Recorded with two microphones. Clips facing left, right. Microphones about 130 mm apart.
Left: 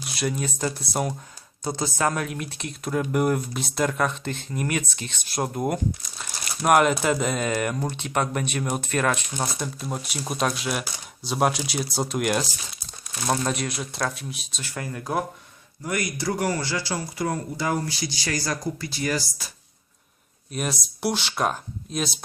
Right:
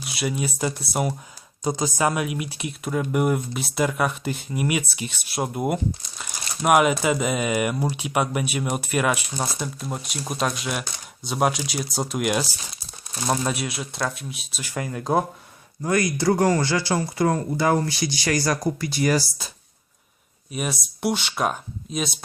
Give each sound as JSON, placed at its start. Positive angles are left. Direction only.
{"t": 0.0, "sound": "speech", "side_deg": -5}
{"t": 1.6, "sound": "speech", "side_deg": -15}
{"t": 14.6, "sound": "speech", "side_deg": -15}
{"t": 15.8, "sound": "speech", "side_deg": -90}
{"t": 16.1, "sound": "speech", "side_deg": -70}
{"t": 17.8, "sound": "speech", "side_deg": -20}
{"t": 18.3, "sound": "speech", "side_deg": -70}
{"t": 20.5, "sound": "speech", "side_deg": 0}